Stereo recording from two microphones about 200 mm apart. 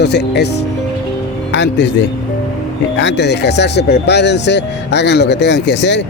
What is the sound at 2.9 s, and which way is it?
Speech, 60° left (ahead or behind).